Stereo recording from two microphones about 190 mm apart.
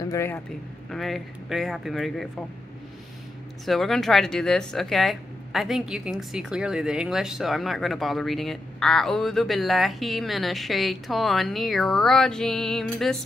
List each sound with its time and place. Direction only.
0.1 s speech: 15° left (ahead or behind)
0.8 s speech: centre (ahead or behind)
3.6 s speech: centre (ahead or behind)